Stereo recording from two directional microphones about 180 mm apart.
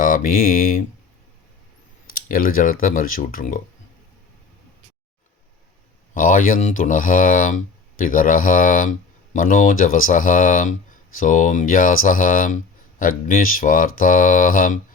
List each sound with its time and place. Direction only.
0.0 s speech: 50° left (ahead or behind)
2.0 s speech: 50° left (ahead or behind)
6.1 s speech: 50° left (ahead or behind)